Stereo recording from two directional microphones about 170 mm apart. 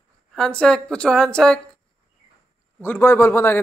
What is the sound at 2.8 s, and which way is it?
Speech, 10° left (ahead or behind).